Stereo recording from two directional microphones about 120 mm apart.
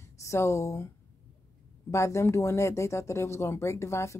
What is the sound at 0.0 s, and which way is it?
Speech, 25° left (ahead or behind).